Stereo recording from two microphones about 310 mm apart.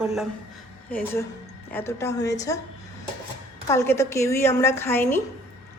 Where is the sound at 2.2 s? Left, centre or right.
Left.